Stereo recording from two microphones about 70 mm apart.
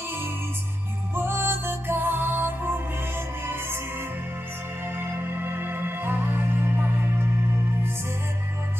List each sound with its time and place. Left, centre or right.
1.1 s music: right
4.8 s music: right